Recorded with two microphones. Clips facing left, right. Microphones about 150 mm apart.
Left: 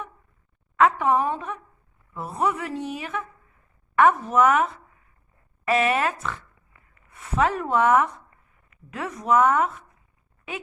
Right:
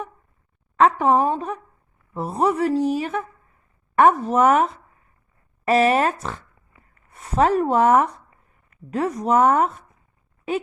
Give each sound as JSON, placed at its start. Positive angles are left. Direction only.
{"t": 0.8, "sound": "speech", "side_deg": -35}